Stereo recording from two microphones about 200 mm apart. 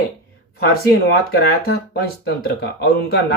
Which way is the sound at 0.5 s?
50° left (ahead or behind).